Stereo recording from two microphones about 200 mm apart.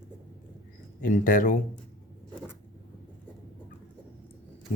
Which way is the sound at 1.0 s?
40° left (ahead or behind).